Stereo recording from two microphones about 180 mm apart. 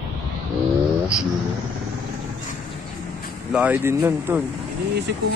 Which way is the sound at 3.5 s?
10° right (ahead or behind).